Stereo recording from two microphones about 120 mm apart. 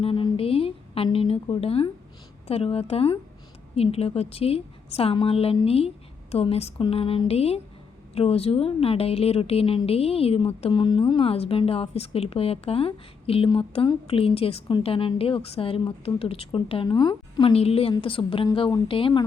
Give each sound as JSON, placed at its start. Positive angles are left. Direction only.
{"t": 0.0, "sound": "a woman's voice", "side_deg": 45}
{"t": 16.9, "sound": "a woman's voice", "side_deg": 35}
{"t": 17.5, "sound": "a woman's voice", "side_deg": 55}